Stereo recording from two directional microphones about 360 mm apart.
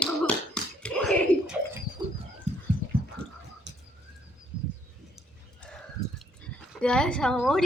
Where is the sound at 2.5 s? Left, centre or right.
Centre.